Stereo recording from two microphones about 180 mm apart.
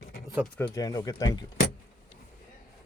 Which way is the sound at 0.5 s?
15° left (ahead or behind).